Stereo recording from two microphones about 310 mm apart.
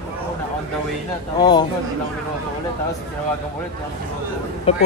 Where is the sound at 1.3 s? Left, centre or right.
Centre.